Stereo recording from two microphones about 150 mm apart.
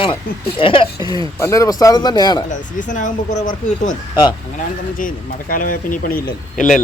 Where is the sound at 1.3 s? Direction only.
20° left (ahead or behind).